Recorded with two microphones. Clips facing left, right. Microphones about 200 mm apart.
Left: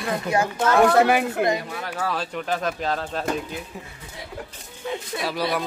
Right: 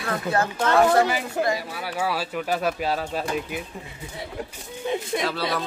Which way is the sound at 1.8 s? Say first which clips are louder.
Right 1 dB; 10° right (ahead or behind).